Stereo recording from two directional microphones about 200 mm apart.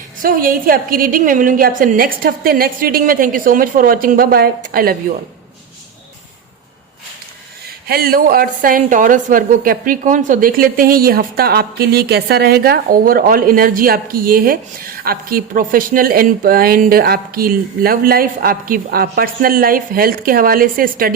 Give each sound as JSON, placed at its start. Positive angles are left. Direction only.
{"t": 0.2, "sound": "a woman's voice", "side_deg": -45}
{"t": 7.9, "sound": "a woman's voice", "side_deg": -50}